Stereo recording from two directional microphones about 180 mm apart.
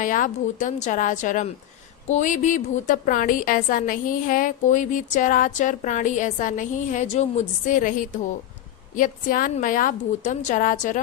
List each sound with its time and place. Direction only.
0.0 s a woman's voice: 45° left (ahead or behind)